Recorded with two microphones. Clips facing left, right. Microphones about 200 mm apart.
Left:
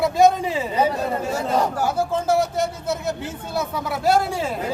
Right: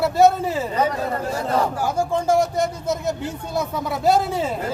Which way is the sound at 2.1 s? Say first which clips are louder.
Right 4 dB; 5° left (ahead or behind).